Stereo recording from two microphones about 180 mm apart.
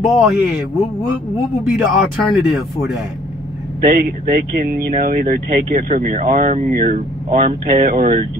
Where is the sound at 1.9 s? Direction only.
Centre (ahead or behind).